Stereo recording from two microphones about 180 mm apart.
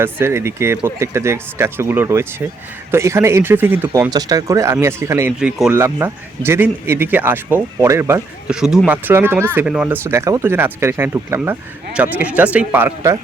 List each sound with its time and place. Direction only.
0.0 s speech: 15° right (ahead or behind)
5.4 s speech: 5° right (ahead or behind)
5.7 s speech: 15° right (ahead or behind)